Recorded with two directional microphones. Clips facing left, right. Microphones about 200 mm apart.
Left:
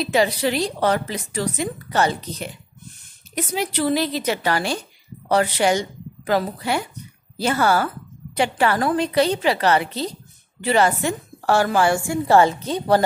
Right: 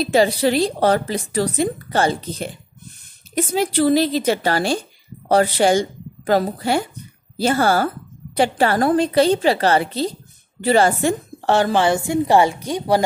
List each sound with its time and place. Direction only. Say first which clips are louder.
0.1 s a woman's voice: right 4 dB; 35° right (ahead or behind); by 13.0 s 10° right (ahead or behind)